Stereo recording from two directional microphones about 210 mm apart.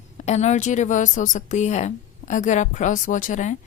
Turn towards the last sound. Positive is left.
turn(degrees=35)  # may be behind; listen again after turning